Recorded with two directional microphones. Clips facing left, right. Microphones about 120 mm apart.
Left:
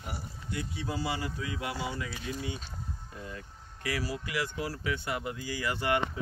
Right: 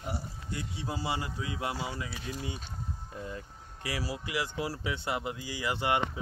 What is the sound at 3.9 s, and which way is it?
Speech, 25° right (ahead or behind).